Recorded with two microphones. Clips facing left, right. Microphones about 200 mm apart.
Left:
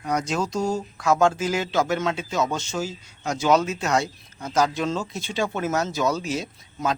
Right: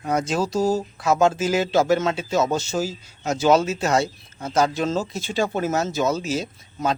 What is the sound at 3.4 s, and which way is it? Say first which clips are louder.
Speech: right 3 dB; 30° right (ahead or behind).